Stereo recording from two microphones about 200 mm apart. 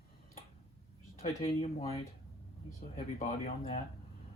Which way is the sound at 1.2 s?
30° left (ahead or behind).